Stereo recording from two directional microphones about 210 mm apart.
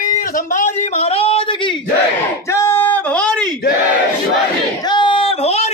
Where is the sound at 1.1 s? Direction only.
25° left (ahead or behind).